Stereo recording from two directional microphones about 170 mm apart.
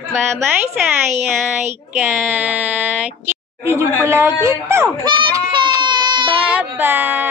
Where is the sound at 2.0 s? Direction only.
10° right (ahead or behind).